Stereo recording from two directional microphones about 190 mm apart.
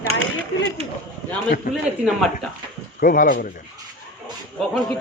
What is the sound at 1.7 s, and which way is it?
Speech, 50° left (ahead or behind).